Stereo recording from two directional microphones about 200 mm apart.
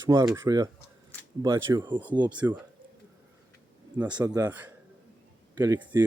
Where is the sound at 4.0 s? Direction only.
5° right (ahead or behind).